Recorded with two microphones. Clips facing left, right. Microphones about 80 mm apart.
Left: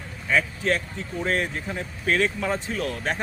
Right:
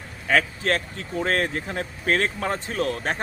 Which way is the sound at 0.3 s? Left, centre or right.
Right.